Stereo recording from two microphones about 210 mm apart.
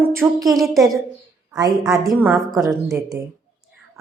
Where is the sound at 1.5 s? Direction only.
15° right (ahead or behind); by 3.0 s centre (ahead or behind).